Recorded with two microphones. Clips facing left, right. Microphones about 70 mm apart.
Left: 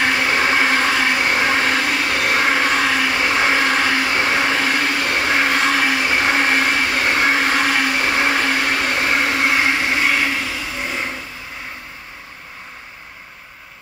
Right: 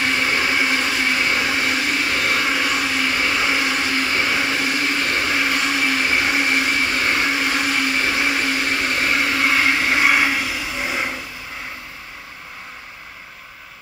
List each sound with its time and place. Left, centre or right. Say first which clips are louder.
0.4 s vehicle: left 4 dB; left
4.1 s vacuum cleaner: left 3 dB; left
5.2 s vehicle: left 3 dB; left
7.1 s blender: left 3 dB; left
8.1 s vacuum cleaner: left 3 dB; left
9.0 s blender: even; left
9.8 s vehicle: right 1 dB; centre